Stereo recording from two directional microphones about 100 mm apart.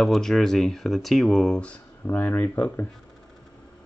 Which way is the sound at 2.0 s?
15° left (ahead or behind).